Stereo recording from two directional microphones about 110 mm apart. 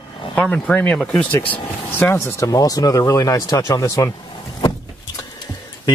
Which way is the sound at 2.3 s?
30° left (ahead or behind).